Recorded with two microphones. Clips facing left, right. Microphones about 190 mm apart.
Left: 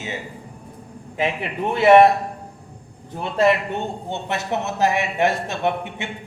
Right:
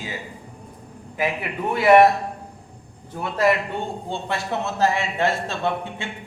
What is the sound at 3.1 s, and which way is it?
A man's voice, 25° left (ahead or behind).